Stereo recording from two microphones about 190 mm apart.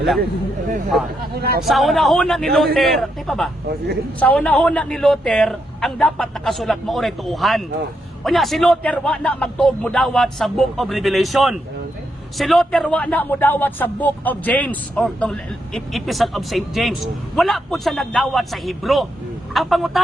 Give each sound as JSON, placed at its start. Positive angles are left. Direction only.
{"t": 1.4, "sound": "speech", "side_deg": -55}
{"t": 1.6, "sound": "a man's voice", "side_deg": 0}